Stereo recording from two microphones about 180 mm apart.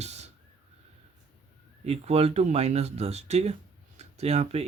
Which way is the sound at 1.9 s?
35° right (ahead or behind).